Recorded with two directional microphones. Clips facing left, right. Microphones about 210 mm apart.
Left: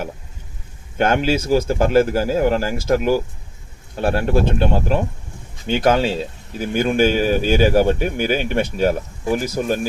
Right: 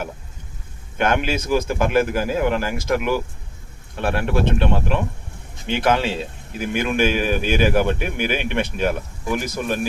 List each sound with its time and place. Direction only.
0.9 s speech: 35° left (ahead or behind)